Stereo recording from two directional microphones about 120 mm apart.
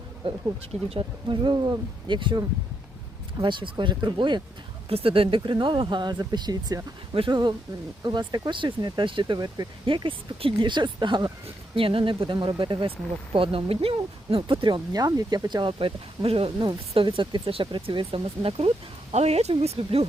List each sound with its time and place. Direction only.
0.2 s speech: 45° right (ahead or behind)
3.4 s speech: 40° right (ahead or behind)
4.9 s speech: 50° right (ahead or behind)
19.1 s speech: 65° right (ahead or behind)